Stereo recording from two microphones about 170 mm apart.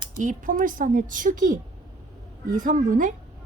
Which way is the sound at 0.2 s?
50° right (ahead or behind).